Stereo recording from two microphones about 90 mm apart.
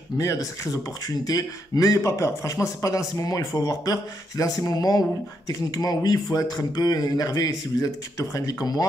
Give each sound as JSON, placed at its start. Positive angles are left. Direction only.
{"t": 0.2, "sound": "speech", "side_deg": 40}